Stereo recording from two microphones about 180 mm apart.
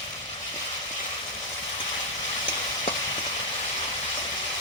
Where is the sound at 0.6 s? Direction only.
25° left (ahead or behind).